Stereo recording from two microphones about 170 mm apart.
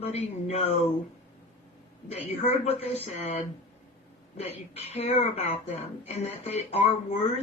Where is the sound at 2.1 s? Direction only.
40° left (ahead or behind).